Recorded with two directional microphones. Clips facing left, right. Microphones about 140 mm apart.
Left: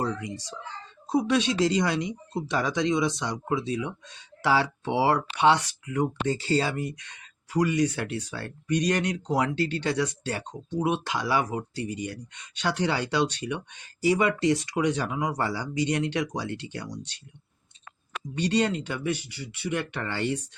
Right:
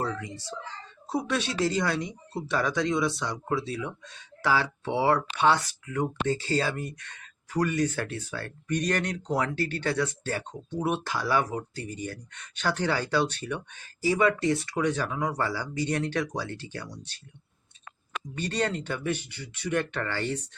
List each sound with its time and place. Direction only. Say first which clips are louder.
0.0 s speech: left 2 dB; 15° left (ahead or behind)
18.4 s speech: left 4 dB; 15° left (ahead or behind)